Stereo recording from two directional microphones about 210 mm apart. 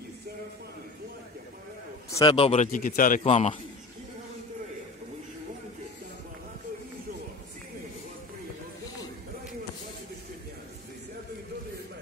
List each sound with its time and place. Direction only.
2.0 s a man's voice: 15° left (ahead or behind)
2.3 s a man's voice: 30° left (ahead or behind)